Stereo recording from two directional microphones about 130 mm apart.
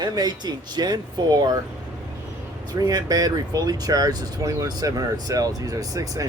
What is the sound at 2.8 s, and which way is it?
Speech, 30° right (ahead or behind).